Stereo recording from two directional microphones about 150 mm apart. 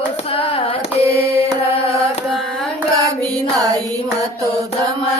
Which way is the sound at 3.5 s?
25° right (ahead or behind).